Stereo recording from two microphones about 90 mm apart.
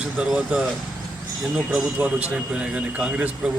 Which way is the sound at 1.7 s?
5° right (ahead or behind).